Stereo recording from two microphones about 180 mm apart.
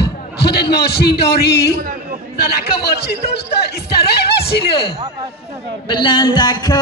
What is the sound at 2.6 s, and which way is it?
Speech, 65° left (ahead or behind).